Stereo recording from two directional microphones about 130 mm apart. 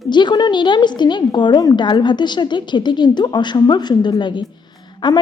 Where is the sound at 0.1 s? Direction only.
35° left (ahead or behind).